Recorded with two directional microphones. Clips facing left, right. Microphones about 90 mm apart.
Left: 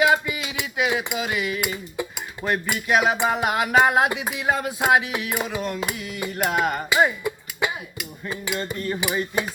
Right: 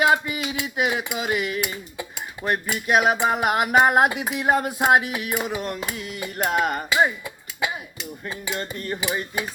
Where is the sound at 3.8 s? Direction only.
45° right (ahead or behind).